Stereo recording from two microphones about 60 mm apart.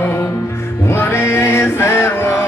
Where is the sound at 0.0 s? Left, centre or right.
Left.